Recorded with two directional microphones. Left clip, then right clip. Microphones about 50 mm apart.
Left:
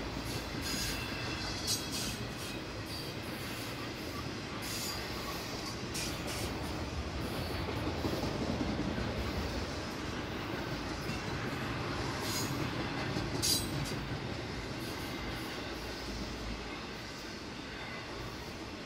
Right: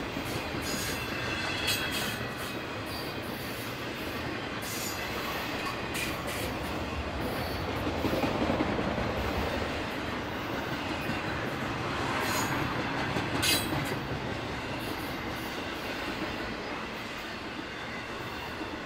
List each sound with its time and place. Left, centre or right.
12.0 s train: left
13.4 s train: left